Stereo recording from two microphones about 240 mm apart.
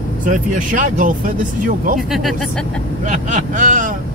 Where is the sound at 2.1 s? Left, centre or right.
Centre.